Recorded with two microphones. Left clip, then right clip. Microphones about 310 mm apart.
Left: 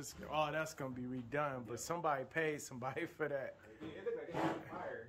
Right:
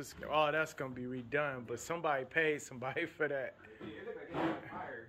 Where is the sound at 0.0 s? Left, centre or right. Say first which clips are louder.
Right 6 dB; centre.